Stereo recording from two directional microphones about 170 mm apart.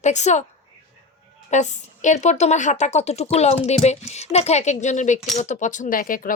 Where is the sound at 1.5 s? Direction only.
45° left (ahead or behind).